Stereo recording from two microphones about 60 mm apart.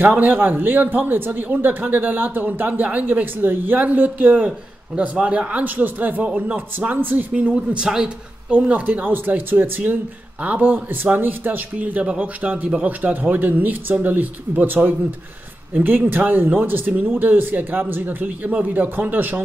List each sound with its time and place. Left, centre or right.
0.0 s speech: right